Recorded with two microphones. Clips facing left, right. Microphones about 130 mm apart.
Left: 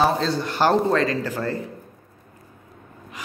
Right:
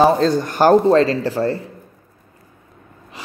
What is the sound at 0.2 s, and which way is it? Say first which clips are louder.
Speech: right 6 dB; 45° right (ahead or behind).